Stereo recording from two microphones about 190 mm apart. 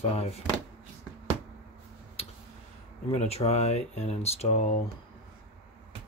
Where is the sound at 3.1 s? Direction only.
35° left (ahead or behind).